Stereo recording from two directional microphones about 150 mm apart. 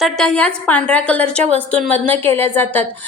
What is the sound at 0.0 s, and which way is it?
A woman's voice, 5° left (ahead or behind).